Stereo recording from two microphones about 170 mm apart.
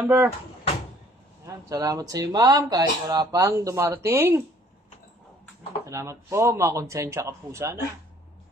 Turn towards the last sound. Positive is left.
turn(degrees=-15)  # may be behind; listen again after turning